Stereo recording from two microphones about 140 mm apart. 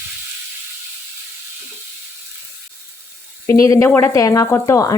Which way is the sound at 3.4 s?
25° left (ahead or behind).